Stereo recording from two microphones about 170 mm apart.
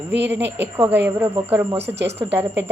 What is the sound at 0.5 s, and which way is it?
Speech, 15° right (ahead or behind).